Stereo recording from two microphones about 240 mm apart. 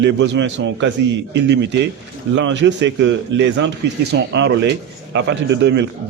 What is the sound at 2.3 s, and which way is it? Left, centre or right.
A man's voice, right.